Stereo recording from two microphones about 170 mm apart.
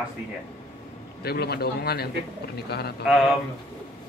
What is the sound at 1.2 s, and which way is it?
A man's voice, 70° left (ahead or behind).